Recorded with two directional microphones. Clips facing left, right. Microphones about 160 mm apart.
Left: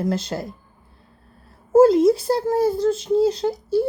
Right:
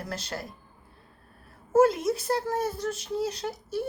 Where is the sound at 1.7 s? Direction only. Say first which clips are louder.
Left 8 dB; 30° left (ahead or behind).